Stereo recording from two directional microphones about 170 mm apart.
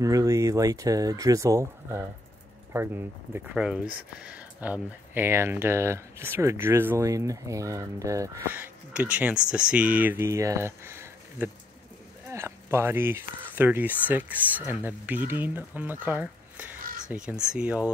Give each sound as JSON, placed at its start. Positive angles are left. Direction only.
{"t": 0.0, "sound": "speech", "side_deg": -20}